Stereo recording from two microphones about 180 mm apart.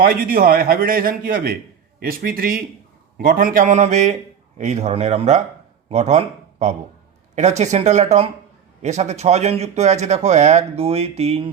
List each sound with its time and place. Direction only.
0.0 s a man's voice: 55° right (ahead or behind); by 11.5 s 35° right (ahead or behind)